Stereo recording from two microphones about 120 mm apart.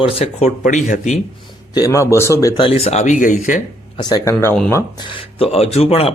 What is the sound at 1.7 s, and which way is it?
Speech, 25° left (ahead or behind).